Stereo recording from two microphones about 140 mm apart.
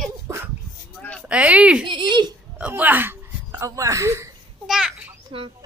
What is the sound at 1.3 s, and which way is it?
Speech, 10° right (ahead or behind).